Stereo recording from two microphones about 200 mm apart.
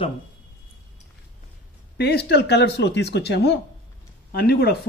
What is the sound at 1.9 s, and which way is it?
Speech, 55° left (ahead or behind).